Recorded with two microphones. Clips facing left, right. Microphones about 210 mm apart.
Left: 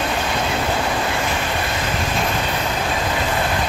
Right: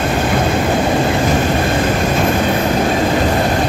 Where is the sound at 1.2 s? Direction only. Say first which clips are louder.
Right 8 dB; 45° right (ahead or behind).